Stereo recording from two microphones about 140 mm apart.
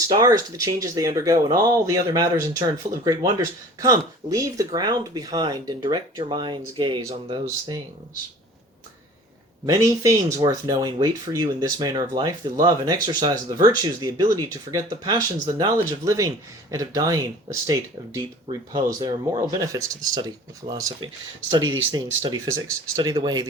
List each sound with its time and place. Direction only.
0.1 s speech: 25° right (ahead or behind)
9.6 s speech: 25° right (ahead or behind)
22.4 s speech: 20° right (ahead or behind)